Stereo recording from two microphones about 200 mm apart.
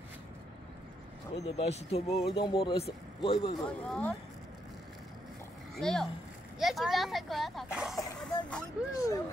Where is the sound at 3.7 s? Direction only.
5° left (ahead or behind).